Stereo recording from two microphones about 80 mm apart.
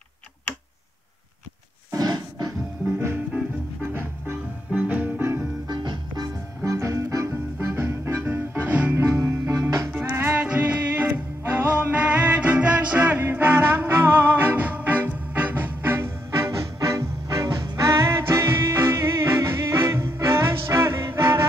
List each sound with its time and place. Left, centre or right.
1.9 s a sound: right
3.8 s music: right
5.7 s music: right
6.6 s music: right
8.9 s music: right
10.0 s music: right
10.4 s music: centre